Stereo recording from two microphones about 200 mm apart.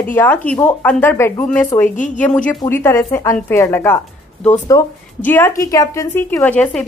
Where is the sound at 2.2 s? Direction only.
5° left (ahead or behind).